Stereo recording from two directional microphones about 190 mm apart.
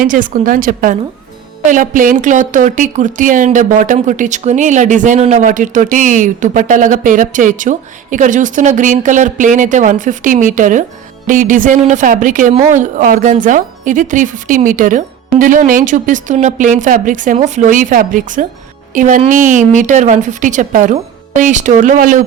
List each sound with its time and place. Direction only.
0.0 s a woman's voice: 45° right (ahead or behind)